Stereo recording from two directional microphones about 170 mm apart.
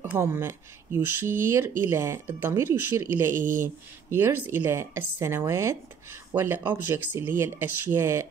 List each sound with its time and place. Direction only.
0.1 s speech: 15° right (ahead or behind)